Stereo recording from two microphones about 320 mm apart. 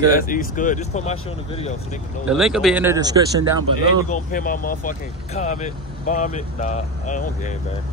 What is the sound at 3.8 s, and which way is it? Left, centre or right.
Speech, left.